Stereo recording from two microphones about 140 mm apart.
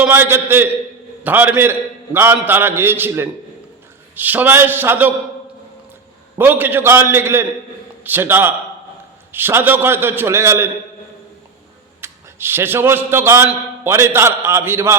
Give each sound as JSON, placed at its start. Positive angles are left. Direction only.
{"t": 0.0, "sound": "a man's voice", "side_deg": -15}
{"t": 6.3, "sound": "a man's voice", "side_deg": -15}
{"t": 11.9, "sound": "a man's voice", "side_deg": -15}